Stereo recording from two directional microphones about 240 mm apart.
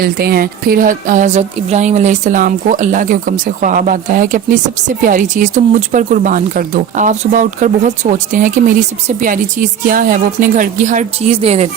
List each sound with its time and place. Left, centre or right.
0.0 s speech: right